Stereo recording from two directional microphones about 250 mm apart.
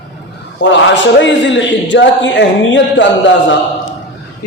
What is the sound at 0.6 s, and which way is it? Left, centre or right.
A man's voice, left.